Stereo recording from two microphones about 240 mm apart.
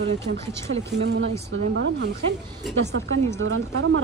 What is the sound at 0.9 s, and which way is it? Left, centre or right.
Speech, right.